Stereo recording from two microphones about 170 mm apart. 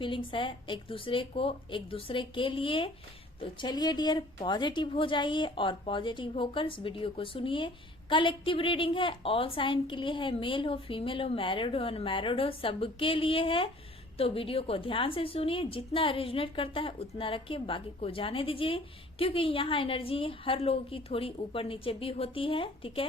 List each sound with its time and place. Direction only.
0.0 s a woman's voice: 30° left (ahead or behind)